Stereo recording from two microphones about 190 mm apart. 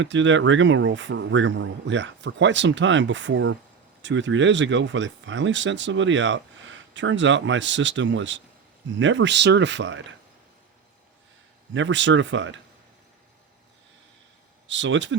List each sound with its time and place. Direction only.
0.0 s speech: 75° right (ahead or behind)
11.7 s speech: 75° right (ahead or behind)
14.7 s speech: 75° right (ahead or behind)